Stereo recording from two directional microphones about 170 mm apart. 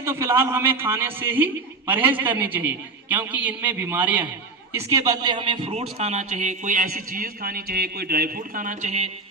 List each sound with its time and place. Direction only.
0.0 s a man's voice: 15° right (ahead or behind)
4.9 s speech: 20° right (ahead or behind); by 9.0 s 40° right (ahead or behind)